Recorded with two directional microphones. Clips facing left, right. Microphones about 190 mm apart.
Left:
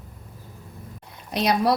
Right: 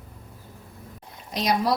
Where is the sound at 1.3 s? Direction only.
60° left (ahead or behind).